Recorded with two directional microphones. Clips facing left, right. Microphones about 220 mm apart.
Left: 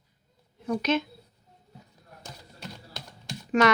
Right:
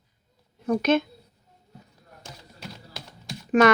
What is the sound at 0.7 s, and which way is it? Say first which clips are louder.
Speech: right 5 dB; 50° right (ahead or behind).